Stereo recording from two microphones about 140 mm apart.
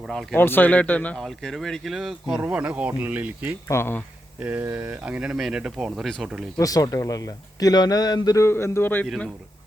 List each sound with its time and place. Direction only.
0.1 s speech: centre (ahead or behind)
0.3 s speech: 15° left (ahead or behind); by 3.5 s 10° right (ahead or behind)
3.7 s speech: 15° left (ahead or behind)
4.4 s speech: 10° right (ahead or behind)
6.6 s a man's voice: 25° left (ahead or behind); by 9.3 s 5° left (ahead or behind)